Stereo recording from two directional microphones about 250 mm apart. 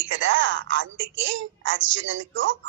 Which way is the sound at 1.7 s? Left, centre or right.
Right.